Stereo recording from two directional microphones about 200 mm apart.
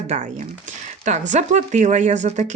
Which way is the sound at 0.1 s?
35° right (ahead or behind).